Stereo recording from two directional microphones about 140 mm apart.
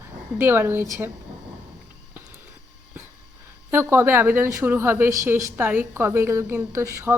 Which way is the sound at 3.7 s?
20° right (ahead or behind).